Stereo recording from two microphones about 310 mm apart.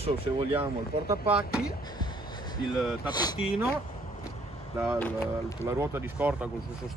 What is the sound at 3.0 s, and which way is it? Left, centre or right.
Speech, centre.